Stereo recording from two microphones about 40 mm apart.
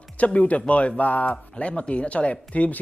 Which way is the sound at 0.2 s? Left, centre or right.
Left.